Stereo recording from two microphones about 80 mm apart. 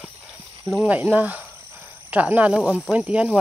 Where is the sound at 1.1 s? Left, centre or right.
Centre.